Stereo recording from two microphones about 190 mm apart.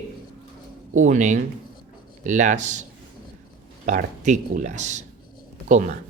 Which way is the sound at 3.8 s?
40° right (ahead or behind).